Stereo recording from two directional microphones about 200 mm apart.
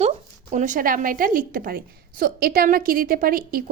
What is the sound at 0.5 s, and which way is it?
A woman's voice, 40° right (ahead or behind).